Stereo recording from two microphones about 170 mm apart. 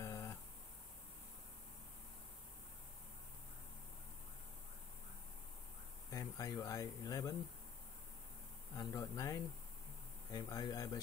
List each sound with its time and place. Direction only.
0.0 s a sound: 15° left (ahead or behind)
6.0 s insect: 20° left (ahead or behind)
8.7 s speech: 20° left (ahead or behind)